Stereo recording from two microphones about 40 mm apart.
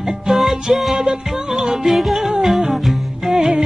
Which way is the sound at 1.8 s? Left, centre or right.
Centre.